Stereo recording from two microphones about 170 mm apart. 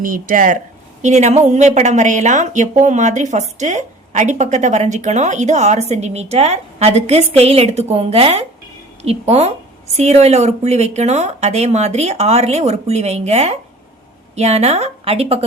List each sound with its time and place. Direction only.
0.0 s speech: 55° right (ahead or behind); by 15.4 s 35° right (ahead or behind)